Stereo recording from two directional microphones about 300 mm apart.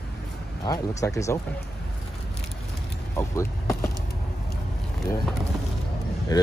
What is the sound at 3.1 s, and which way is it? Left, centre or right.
Vehicle, centre.